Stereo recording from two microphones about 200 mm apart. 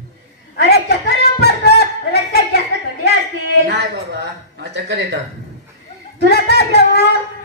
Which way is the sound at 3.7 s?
55° right (ahead or behind).